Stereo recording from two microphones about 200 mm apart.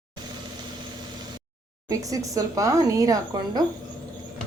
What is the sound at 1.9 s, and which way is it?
Speech, 15° right (ahead or behind).